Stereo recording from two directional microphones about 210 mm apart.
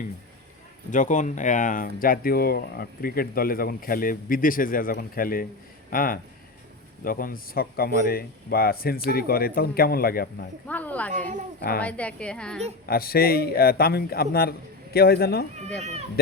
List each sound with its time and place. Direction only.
0.9 s speech: 35° left (ahead or behind)
10.7 s a sound: 5° left (ahead or behind)
11.8 s a woman's voice: 5° left (ahead or behind)
12.8 s speech: 45° left (ahead or behind)
15.8 s speech: 30° right (ahead or behind)